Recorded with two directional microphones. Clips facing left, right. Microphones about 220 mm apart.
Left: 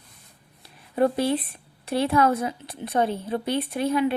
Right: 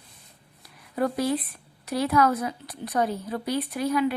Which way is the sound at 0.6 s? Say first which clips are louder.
Left 5 dB; 25° left (ahead or behind).